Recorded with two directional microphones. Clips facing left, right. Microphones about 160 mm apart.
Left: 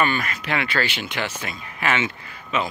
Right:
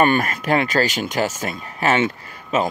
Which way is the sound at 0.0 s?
45° right (ahead or behind).